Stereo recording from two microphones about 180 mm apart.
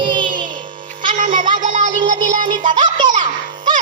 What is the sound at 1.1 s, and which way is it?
Music, 45° right (ahead or behind).